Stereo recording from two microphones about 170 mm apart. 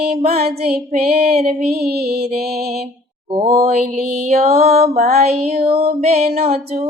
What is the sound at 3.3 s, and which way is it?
Music, 40° right (ahead or behind).